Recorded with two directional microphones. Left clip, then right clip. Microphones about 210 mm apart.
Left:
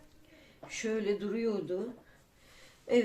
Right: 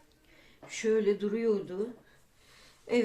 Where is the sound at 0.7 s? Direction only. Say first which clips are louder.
Right 5 dB; 30° right (ahead or behind).